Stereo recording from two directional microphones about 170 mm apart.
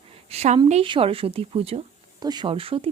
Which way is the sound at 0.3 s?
40° right (ahead or behind).